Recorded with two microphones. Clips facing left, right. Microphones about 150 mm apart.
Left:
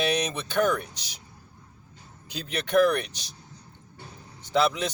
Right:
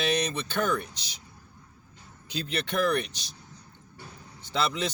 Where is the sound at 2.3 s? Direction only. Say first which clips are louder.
Left 6 dB; 10° left (ahead or behind).